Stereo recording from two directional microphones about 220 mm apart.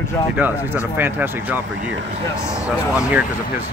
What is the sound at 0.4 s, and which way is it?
Speech, 10° right (ahead or behind).